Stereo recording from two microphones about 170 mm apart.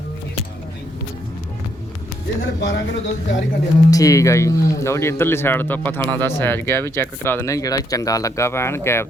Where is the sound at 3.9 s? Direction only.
20° left (ahead or behind).